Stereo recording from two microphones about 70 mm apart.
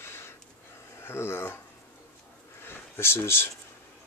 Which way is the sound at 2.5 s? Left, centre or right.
Left.